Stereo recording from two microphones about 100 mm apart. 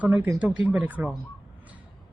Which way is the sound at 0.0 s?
15° right (ahead or behind).